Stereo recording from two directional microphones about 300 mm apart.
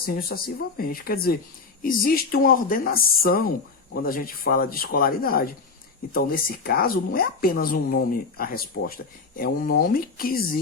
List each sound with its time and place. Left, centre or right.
0.0 s speech: left